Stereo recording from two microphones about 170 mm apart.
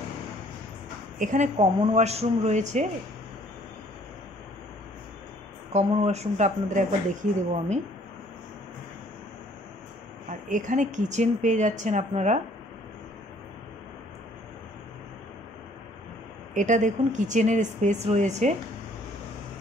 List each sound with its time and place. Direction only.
1.2 s speech: 45° right (ahead or behind)
5.7 s speech: 40° right (ahead or behind)
10.5 s speech: 50° right (ahead or behind)
16.5 s speech: 45° right (ahead or behind)